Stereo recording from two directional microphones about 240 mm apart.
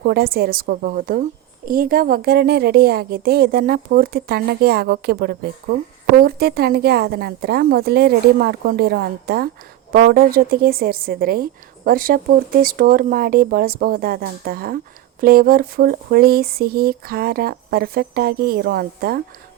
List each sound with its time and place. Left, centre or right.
0.0 s a woman's voice: right